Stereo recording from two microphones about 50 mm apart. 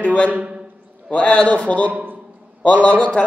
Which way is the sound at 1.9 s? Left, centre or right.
Right.